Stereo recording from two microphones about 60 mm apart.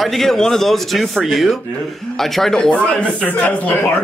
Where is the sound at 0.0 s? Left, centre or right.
Centre.